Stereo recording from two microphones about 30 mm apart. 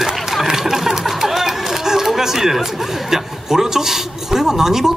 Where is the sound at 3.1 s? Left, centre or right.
Centre.